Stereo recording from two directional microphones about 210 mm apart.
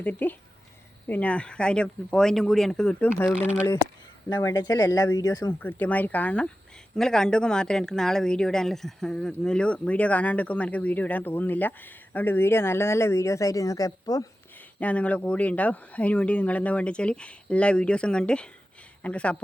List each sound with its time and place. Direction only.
0.0 s speech: 10° left (ahead or behind)
3.3 s speech: 5° right (ahead or behind)
4.3 s speech: 15° left (ahead or behind)
14.8 s speech: 5° left (ahead or behind)